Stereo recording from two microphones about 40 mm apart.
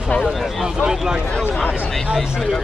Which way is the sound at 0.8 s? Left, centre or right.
Centre.